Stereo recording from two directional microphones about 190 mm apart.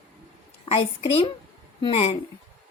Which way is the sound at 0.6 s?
30° left (ahead or behind).